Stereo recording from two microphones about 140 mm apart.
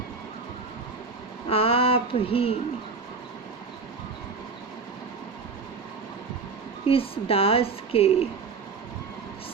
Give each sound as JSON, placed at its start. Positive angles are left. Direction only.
{"t": 1.5, "sound": "a woman's voice", "side_deg": 45}
{"t": 6.8, "sound": "a woman's voice", "side_deg": 45}